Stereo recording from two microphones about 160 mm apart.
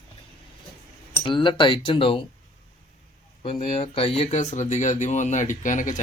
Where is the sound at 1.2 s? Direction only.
30° left (ahead or behind).